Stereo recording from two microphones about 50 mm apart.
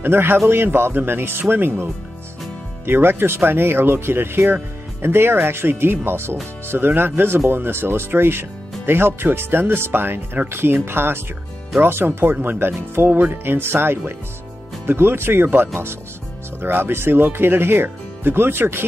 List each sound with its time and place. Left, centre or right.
0.0 s speech: right
2.9 s speech: right